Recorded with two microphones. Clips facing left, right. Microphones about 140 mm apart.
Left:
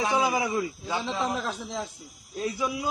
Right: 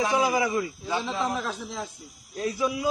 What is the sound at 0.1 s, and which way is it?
Speech, 20° left (ahead or behind).